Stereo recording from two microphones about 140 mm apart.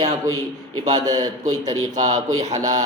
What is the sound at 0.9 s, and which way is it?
A man's voice, 30° right (ahead or behind).